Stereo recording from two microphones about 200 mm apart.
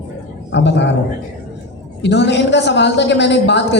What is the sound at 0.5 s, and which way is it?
Speech, 60° left (ahead or behind).